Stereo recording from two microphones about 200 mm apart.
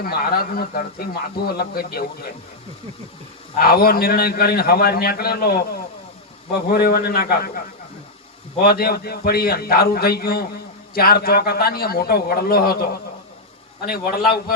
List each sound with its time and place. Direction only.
0.0 s speech: 50° left (ahead or behind)
3.6 s speech: 50° left (ahead or behind)
6.7 s speech: 45° left (ahead or behind)
8.6 s speech: 50° left (ahead or behind)